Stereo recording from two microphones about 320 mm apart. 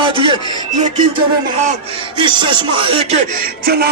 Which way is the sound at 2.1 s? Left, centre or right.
Centre.